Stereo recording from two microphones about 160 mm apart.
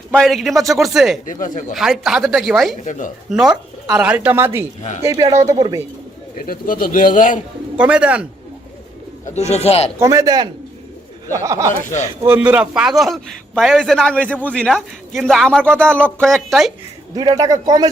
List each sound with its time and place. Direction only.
0.2 s a man's voice: centre (ahead or behind)
1.2 s a man's voice: 55° left (ahead or behind)
1.7 s a man's voice: centre (ahead or behind)
2.8 s speech: 50° left (ahead or behind)
3.2 s speech: 5° right (ahead or behind); by 5.8 s 25° right (ahead or behind)
6.3 s a man's voice: 60° left (ahead or behind)
7.8 s speech: 5° right (ahead or behind)
9.2 s speech: 45° left (ahead or behind)
10.0 s a man's voice: 20° right (ahead or behind); by 16.7 s centre (ahead or behind)
17.2 s speech: 25° right (ahead or behind)